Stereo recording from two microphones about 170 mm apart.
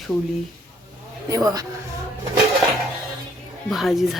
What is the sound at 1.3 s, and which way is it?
Speech, 20° right (ahead or behind).